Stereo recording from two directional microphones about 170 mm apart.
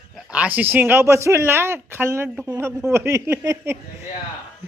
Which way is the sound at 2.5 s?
15° right (ahead or behind).